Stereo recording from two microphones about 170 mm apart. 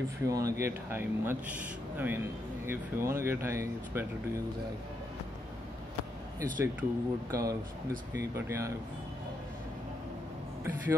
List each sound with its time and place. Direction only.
0.2 s speech: 20° right (ahead or behind)
6.6 s speech: 15° right (ahead or behind)